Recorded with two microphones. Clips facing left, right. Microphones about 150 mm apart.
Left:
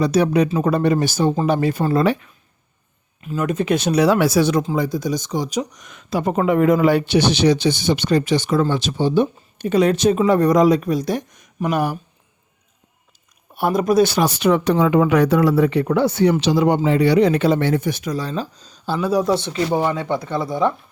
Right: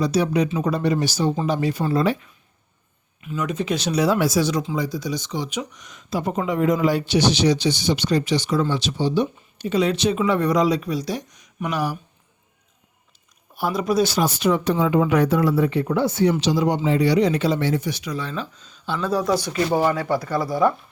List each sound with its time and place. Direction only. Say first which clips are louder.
0.0 s speech: left 4 dB; 60° left (ahead or behind)
0.4 s speech: left 4 dB; 45° left (ahead or behind)
3.2 s speech: left 4 dB; 45° left (ahead or behind)
5.9 s speech: left 4 dB; 65° left (ahead or behind)
13.5 s speech: left 5 dB; 60° left (ahead or behind); by 18.9 s 35° left (ahead or behind)
18.9 s speech: left 4 dB; 10° left (ahead or behind)
19.3 s speech: left 1 dB; 25° left (ahead or behind)